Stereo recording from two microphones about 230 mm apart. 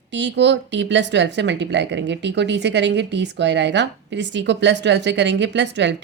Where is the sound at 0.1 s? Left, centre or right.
Right.